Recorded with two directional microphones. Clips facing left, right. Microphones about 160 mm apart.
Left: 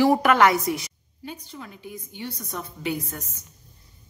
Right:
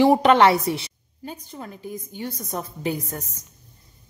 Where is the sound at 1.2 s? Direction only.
40° right (ahead or behind).